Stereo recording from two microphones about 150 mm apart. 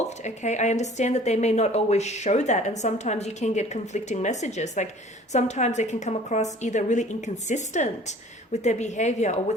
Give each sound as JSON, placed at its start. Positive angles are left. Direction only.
{"t": 0.0, "sound": "speech", "side_deg": 50}